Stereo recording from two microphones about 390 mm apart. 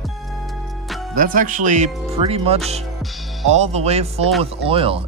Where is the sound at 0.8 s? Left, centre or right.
Centre.